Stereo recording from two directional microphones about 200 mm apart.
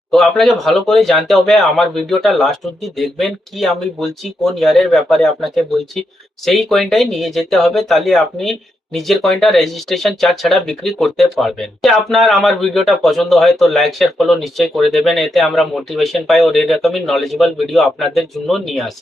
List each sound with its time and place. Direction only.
0.1 s speech: centre (ahead or behind)